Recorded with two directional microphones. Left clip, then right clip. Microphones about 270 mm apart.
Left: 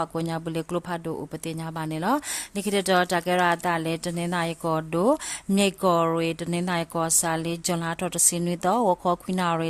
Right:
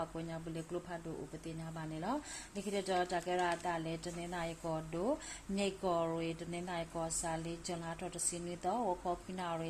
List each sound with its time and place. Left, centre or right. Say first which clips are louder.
0.0 s speech: left 14 dB; left